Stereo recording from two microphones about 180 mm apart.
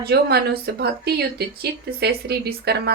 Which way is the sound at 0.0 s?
60° right (ahead or behind).